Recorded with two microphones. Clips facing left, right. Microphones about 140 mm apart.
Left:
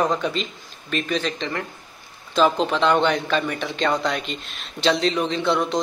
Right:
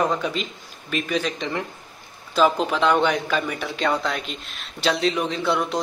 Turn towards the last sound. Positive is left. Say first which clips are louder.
# left 2 dB
turn(degrees=-5)  # may be behind; listen again after turning